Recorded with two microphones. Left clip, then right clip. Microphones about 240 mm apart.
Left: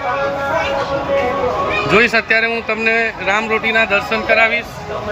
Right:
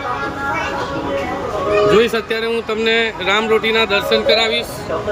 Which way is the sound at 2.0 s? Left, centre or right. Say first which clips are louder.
Left 3 dB; centre.